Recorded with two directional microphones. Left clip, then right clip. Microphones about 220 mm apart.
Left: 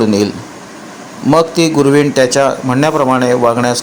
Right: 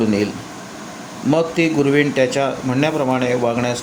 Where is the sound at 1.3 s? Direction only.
20° left (ahead or behind).